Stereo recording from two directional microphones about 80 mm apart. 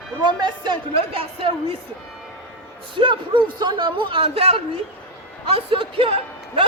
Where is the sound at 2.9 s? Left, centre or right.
Right.